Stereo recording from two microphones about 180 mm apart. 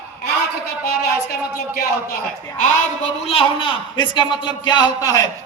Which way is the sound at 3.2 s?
30° left (ahead or behind).